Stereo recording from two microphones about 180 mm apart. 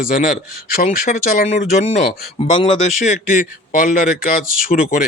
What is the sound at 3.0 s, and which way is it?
Speech, 50° left (ahead or behind).